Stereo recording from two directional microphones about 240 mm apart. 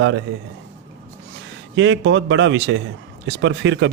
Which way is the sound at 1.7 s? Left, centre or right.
Right.